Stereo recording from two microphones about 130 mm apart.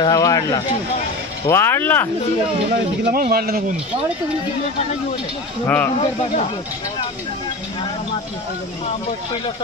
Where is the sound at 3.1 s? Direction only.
90° right.